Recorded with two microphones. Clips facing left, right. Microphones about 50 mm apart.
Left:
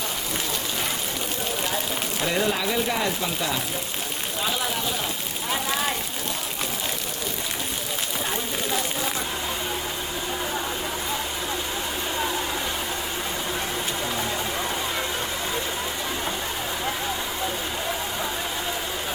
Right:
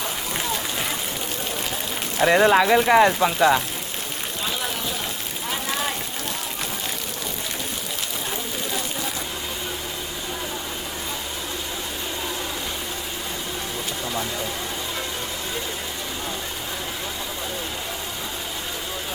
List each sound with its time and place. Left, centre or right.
2.2 s speech: right